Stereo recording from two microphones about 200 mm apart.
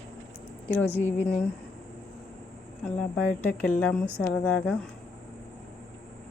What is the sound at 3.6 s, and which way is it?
Speech, 10° left (ahead or behind).